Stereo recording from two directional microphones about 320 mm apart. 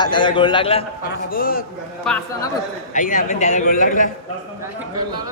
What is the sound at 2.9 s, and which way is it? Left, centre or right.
A man's voice, left.